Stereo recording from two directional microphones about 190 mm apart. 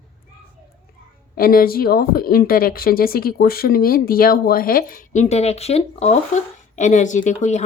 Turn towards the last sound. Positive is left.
turn(degrees=40)  # may be behind; listen again after turning